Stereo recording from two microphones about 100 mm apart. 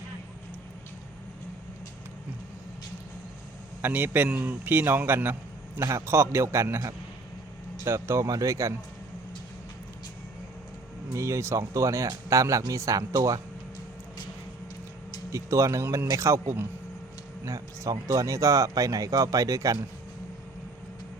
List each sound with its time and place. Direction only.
3.8 s a man's voice: 20° right (ahead or behind)
11.1 s speech: 30° right (ahead or behind)
15.3 s a man's voice: 30° right (ahead or behind)